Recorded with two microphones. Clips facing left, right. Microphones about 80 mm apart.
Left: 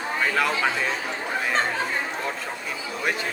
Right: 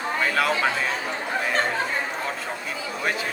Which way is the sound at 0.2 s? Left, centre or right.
Centre.